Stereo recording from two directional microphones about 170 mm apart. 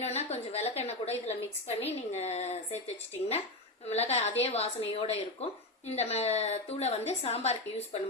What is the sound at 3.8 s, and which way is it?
A woman's voice, 40° left (ahead or behind).